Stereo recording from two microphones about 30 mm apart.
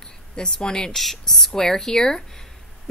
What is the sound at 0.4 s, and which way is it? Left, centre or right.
Speech, left.